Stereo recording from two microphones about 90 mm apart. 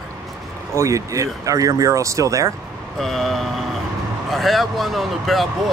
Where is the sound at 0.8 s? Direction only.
35° right (ahead or behind).